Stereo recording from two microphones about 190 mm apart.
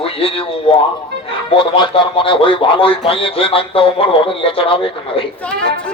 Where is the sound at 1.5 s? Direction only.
25° left (ahead or behind).